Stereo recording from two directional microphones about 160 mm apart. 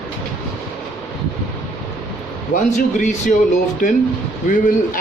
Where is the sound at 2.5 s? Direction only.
50° left (ahead or behind).